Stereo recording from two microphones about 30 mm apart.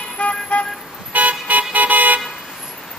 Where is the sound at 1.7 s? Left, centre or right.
Right.